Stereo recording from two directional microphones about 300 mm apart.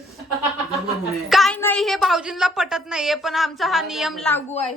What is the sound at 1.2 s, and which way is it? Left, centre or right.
A woman's voice, centre.